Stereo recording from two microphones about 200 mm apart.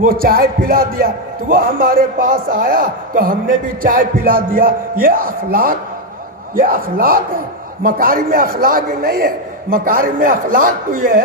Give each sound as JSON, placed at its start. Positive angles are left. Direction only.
{"t": 0.0, "sound": "a man's voice", "side_deg": -45}